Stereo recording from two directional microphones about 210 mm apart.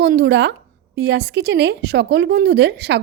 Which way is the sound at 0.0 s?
50° right (ahead or behind).